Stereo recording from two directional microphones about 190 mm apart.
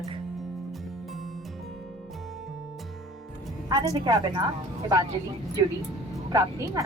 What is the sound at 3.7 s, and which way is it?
Speech, 20° right (ahead or behind).